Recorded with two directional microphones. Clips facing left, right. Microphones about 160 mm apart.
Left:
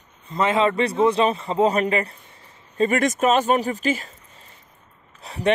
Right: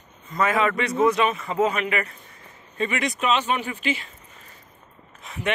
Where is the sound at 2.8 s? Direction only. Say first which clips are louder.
Left 6 dB; 45° left (ahead or behind).